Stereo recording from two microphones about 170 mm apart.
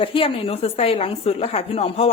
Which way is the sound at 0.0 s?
30° left (ahead or behind).